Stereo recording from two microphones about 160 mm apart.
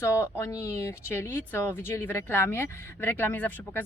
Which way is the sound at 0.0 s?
15° left (ahead or behind).